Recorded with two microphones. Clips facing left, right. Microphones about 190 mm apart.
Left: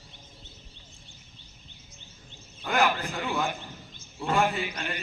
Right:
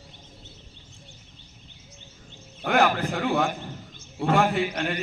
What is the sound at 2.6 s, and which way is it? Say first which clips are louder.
A man's voice: right 4 dB; 60° right (ahead or behind).